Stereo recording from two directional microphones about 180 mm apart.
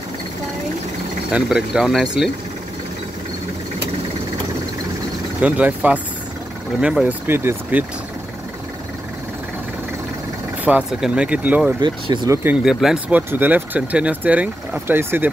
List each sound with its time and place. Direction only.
1.3 s speech: 5° right (ahead or behind)
5.4 s speech: 10° right (ahead or behind)
10.6 s speech: 5° right (ahead or behind)
11.8 s speech: 25° right (ahead or behind)
12.4 s speech: 5° right (ahead or behind)